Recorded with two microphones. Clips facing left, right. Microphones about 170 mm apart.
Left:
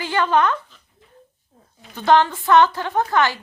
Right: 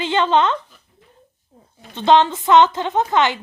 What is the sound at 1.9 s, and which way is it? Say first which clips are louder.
A woman's voice: right 2 dB; 20° right (ahead or behind).